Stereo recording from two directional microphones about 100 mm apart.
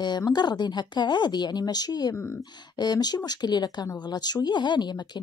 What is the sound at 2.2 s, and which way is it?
Speech, 25° left (ahead or behind).